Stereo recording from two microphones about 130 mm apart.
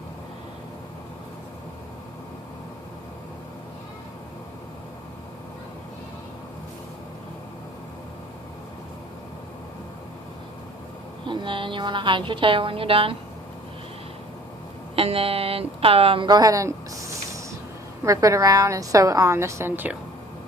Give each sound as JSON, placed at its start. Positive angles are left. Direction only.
{"t": 11.3, "sound": "a woman's voice", "side_deg": -40}
{"t": 14.9, "sound": "a woman's voice", "side_deg": -45}